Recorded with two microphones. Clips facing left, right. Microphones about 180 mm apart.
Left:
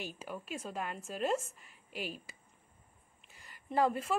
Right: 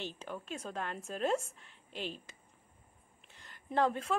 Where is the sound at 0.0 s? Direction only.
10° left (ahead or behind).